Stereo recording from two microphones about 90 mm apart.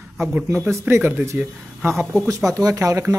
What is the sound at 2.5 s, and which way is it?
Speech, 40° right (ahead or behind).